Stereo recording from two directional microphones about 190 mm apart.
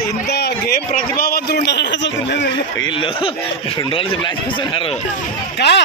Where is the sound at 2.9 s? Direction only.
30° left (ahead or behind).